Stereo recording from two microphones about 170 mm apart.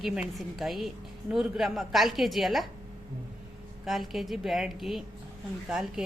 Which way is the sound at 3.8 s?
Centre (ahead or behind).